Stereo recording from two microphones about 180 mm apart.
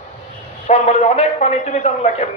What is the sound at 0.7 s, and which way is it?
A man's voice, 35° left (ahead or behind).